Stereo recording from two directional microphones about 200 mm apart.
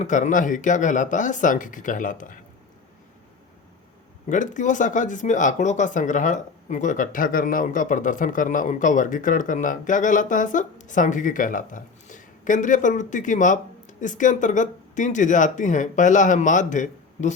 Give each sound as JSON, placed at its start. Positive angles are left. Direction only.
{"t": 0.0, "sound": "speech", "side_deg": 40}
{"t": 4.3, "sound": "speech", "side_deg": 40}